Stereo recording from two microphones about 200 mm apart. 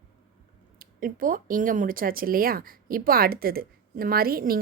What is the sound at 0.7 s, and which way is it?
Speech, 45° right (ahead or behind).